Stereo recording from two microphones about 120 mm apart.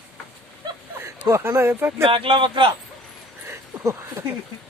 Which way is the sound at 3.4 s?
25° right (ahead or behind).